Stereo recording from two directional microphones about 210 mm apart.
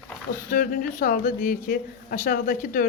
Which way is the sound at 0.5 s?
40° left (ahead or behind).